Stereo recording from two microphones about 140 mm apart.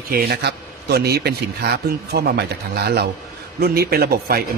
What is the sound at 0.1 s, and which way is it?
Speech, 90° right.